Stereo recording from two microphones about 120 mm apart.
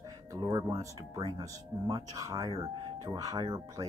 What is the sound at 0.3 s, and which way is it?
Speech, 35° right (ahead or behind).